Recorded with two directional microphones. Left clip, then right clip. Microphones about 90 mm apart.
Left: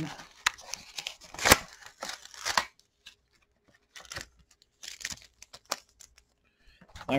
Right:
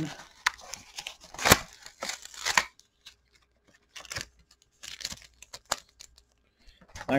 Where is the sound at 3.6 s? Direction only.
10° right (ahead or behind).